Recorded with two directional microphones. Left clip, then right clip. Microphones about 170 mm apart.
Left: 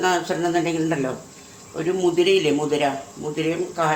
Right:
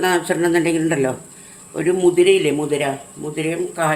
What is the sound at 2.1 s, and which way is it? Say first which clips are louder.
Speech: right 4 dB; 30° right (ahead or behind).